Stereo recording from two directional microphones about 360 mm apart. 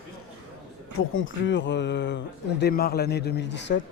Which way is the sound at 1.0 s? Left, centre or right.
Left.